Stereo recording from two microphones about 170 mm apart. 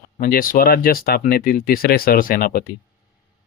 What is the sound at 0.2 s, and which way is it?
Speech, 55° left (ahead or behind).